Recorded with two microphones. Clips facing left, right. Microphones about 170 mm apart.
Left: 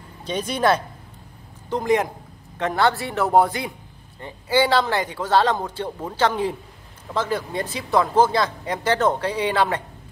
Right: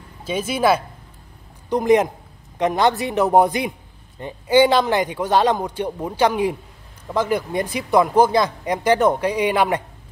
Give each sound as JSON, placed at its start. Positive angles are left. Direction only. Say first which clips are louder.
{"t": 0.2, "sound": "speech", "louder": "right 2 dB", "side_deg": -5}
{"t": 1.7, "sound": "speech", "louder": "right 5 dB", "side_deg": -20}